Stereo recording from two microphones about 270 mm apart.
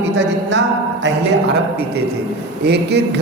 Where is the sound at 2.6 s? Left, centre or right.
Right.